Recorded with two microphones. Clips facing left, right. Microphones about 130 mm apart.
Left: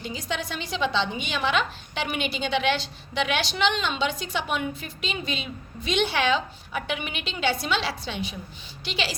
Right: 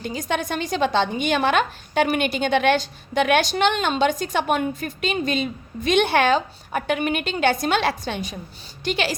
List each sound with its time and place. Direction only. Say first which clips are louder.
0.0 s a woman's voice: right 6 dB; 50° right (ahead or behind)